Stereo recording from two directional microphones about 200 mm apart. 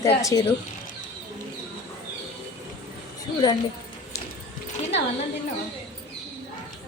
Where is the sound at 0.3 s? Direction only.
15° left (ahead or behind).